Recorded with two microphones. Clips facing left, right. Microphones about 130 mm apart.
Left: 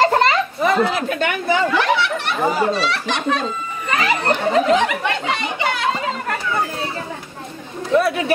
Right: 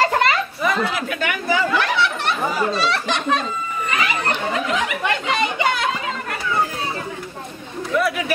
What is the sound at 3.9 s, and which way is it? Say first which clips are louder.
Chatter: left 5 dB; 35° left (ahead or behind).